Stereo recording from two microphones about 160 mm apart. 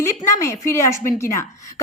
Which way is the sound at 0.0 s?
20° left (ahead or behind).